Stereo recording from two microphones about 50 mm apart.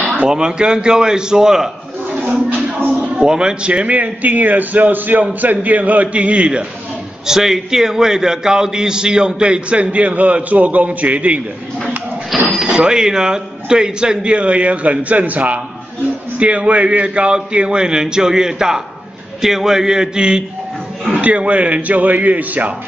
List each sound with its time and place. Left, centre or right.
0.3 s a man's voice: centre
3.0 s a man's voice: right
7.2 s a man's voice: centre; by 11.4 s right
12.3 s cash register: centre
12.6 s a man's voice: centre; by 22.8 s right